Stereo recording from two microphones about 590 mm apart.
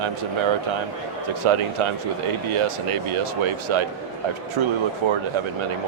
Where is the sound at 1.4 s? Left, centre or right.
Right.